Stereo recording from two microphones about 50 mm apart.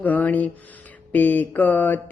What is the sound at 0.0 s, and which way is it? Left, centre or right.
Speech, left.